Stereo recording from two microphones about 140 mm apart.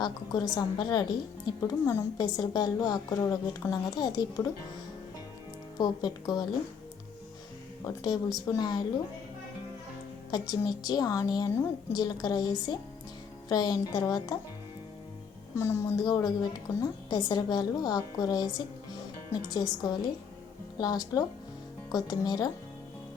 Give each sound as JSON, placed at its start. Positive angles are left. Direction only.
{"t": 0.0, "sound": "a woman's voice", "side_deg": 30}
{"t": 5.7, "sound": "a woman's voice", "side_deg": 30}
{"t": 8.5, "sound": "a woman's voice", "side_deg": 30}
{"t": 10.3, "sound": "a woman's voice", "side_deg": 30}
{"t": 15.5, "sound": "a woman's voice", "side_deg": 20}
{"t": 16.0, "sound": "a woman's voice", "side_deg": 30}